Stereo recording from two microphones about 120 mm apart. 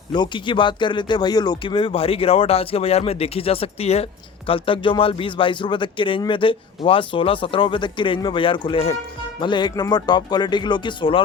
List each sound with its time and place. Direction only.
0.1 s speech: 40° left (ahead or behind)
9.4 s speech: 40° left (ahead or behind)